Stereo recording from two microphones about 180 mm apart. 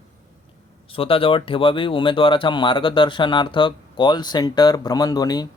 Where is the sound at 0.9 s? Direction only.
30° left (ahead or behind).